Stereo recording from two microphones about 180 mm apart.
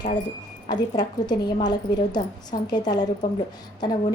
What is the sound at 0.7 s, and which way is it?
A woman's voice, 25° left (ahead or behind).